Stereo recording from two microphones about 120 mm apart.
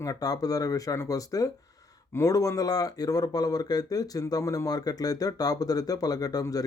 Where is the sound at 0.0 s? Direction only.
30° left (ahead or behind).